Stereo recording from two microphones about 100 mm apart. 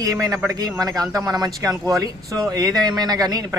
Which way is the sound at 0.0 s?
35° right (ahead or behind).